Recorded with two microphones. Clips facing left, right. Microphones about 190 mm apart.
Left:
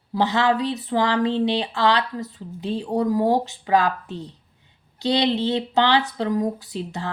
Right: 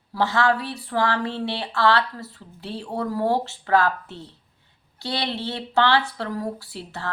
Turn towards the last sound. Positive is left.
turn(degrees=15)  # may be behind; listen again after turning